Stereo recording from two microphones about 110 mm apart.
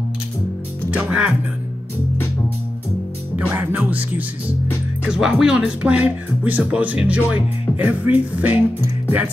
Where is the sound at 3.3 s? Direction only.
15° right (ahead or behind).